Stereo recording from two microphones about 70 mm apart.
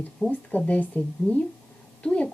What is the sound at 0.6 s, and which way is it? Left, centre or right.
A woman's voice, left.